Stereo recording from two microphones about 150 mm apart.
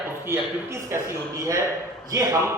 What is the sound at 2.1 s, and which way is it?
Speech, 20° right (ahead or behind).